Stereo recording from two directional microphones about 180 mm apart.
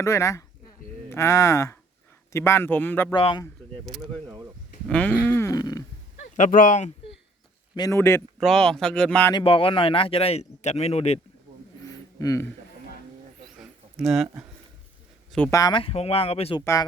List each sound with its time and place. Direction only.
0.0 s speech: 15° left (ahead or behind)
3.1 s speech: 25° left (ahead or behind)
4.9 s a sound: 10° left (ahead or behind)
6.3 s speech: 45° left (ahead or behind)
7.8 s speech: 15° left (ahead or behind)
8.4 s speech: centre (ahead or behind)
9.3 s speech: 30° left (ahead or behind)
11.9 s a sound: 15° left (ahead or behind)
13.6 s a sound: centre (ahead or behind)
15.3 s speech: 10° left (ahead or behind)
15.5 s speech: 25° left (ahead or behind)
16.6 s speech: 20° left (ahead or behind)